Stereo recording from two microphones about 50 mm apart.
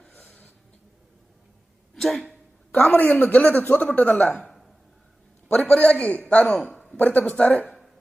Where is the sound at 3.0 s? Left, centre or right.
Left.